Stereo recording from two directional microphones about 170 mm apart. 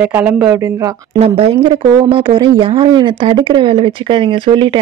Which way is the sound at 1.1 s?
35° right (ahead or behind).